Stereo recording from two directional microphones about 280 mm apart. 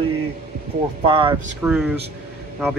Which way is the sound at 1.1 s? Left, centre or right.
Centre.